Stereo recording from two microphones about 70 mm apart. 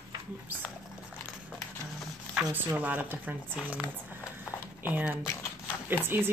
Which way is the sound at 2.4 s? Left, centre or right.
Right.